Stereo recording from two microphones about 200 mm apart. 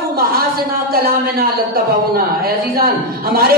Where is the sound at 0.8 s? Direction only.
50° right (ahead or behind).